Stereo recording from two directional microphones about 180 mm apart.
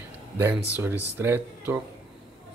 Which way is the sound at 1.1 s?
10° right (ahead or behind).